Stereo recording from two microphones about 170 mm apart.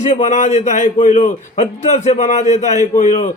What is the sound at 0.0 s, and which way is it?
A man's voice, 45° left (ahead or behind).